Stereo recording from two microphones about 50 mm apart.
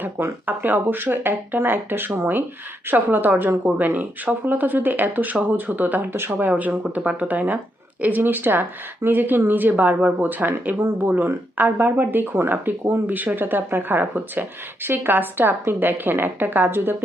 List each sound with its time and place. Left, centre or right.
0.4 s a woman's voice: right
13.1 s a woman's voice: right